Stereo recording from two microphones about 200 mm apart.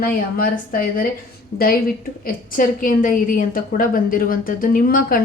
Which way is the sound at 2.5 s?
45° left (ahead or behind).